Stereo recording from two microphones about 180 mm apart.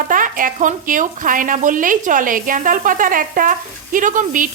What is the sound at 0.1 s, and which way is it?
Speech, 50° right (ahead or behind).